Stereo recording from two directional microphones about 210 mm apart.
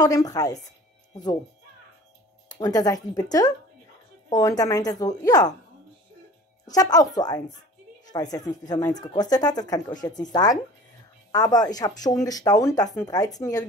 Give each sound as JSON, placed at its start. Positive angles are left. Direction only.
{"t": 0.0, "sound": "speech", "side_deg": 15}
{"t": 2.4, "sound": "speech", "side_deg": 20}
{"t": 6.7, "sound": "speech", "side_deg": 15}